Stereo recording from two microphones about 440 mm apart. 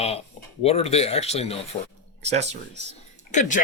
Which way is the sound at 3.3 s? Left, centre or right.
Centre.